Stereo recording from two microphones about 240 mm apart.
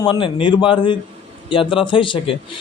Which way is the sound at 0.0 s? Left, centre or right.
Centre.